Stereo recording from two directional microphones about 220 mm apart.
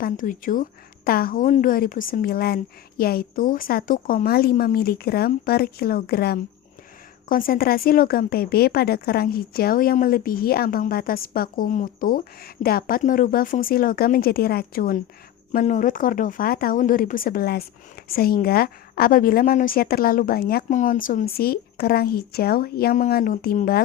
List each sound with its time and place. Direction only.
0.0 s a woman's voice: 40° left (ahead or behind)